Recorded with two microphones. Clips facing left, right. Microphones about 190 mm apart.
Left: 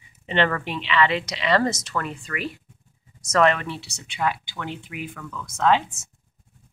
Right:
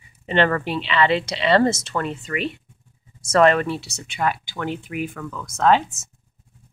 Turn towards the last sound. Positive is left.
turn(degrees=-45)  # may be behind; listen again after turning